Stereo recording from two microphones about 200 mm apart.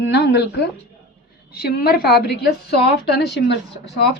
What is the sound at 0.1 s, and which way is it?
Speech, 60° left (ahead or behind).